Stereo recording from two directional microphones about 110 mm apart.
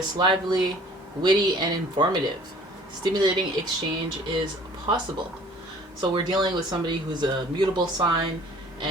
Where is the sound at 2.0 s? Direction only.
40° right (ahead or behind).